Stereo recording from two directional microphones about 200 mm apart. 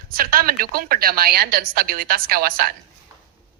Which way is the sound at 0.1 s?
45° right (ahead or behind).